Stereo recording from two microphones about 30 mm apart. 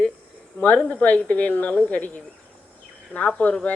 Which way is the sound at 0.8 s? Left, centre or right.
Left.